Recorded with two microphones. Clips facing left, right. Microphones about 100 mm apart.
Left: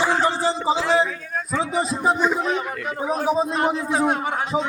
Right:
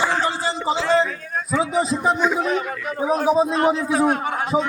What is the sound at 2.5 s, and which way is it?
Speech, 20° left (ahead or behind).